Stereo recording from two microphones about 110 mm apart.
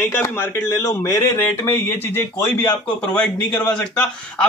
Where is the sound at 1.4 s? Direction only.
20° left (ahead or behind).